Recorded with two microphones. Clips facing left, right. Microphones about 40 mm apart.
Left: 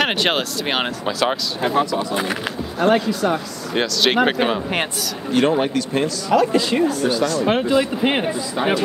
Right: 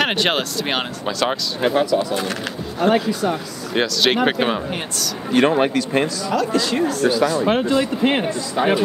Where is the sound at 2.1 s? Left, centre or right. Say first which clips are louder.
Left 1 dB; centre.